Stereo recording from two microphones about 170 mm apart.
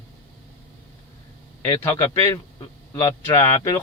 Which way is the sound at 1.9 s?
20° left (ahead or behind).